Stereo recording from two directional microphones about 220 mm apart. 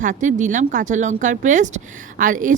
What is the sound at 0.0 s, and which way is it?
A woman's voice, 35° right (ahead or behind).